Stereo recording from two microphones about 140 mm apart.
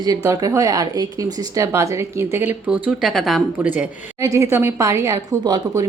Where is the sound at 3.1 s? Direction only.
Centre (ahead or behind).